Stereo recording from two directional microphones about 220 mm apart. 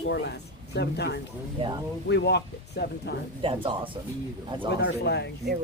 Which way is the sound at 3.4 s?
25° right (ahead or behind).